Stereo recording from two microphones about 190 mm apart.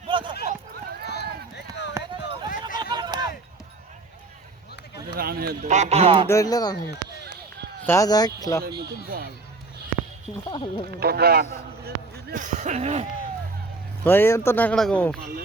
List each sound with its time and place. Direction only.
0.1 s a sound: 25° right (ahead or behind)
0.4 s run: 55° right (ahead or behind)
1.0 s run: 60° left (ahead or behind)
1.9 s run: 15° right (ahead or behind)
2.7 s a sound: 20° right (ahead or behind)
5.1 s speech: 50° right (ahead or behind)
5.6 s speech: 35° right (ahead or behind)
6.2 s speech: 15° left (ahead or behind)
7.9 s speech: 15° left (ahead or behind)
8.6 s speech: 55° right (ahead or behind)
10.5 s speech: 25° left (ahead or behind)
11.0 s speech: 55° right (ahead or behind)
12.3 s speech: 40° right (ahead or behind)
14.0 s speech: 10° left (ahead or behind)